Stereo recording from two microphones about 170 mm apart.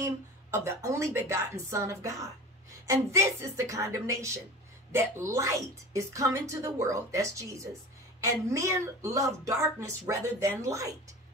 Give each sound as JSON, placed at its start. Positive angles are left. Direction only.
{"t": 0.0, "sound": "a woman's voice", "side_deg": -15}